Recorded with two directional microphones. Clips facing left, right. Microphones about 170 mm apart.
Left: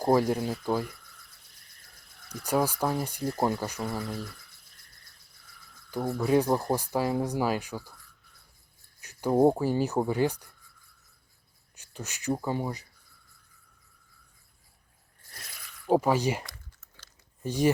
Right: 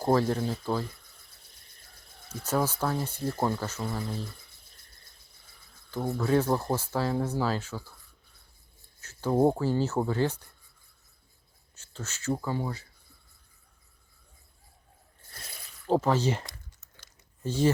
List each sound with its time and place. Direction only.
0.0 s speech: 15° left (ahead or behind)
1.7 s a sound: 25° right (ahead or behind)
2.4 s speech: 10° left (ahead or behind)
4.0 s a sound: 25° right (ahead or behind)
6.1 s speech: 15° left (ahead or behind)
9.0 s a sound: 15° left (ahead or behind)
9.6 s speech: 15° left (ahead or behind)
11.8 s speech: 15° left (ahead or behind)
15.2 s biting: 25° right (ahead or behind)
15.9 s speech: 10° left (ahead or behind)
16.4 s typing: 25° right (ahead or behind)
17.4 s speech: 15° left (ahead or behind)